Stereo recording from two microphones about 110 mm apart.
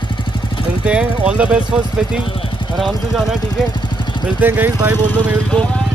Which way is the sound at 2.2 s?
50° left (ahead or behind).